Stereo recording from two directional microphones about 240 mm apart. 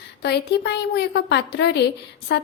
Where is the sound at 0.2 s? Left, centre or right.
Left.